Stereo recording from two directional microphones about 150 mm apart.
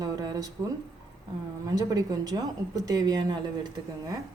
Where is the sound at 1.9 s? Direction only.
25° right (ahead or behind).